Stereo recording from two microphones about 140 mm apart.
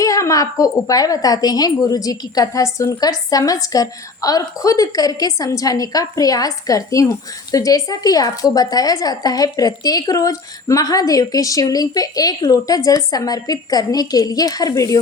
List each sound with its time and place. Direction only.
0.0 s speech: 25° left (ahead or behind)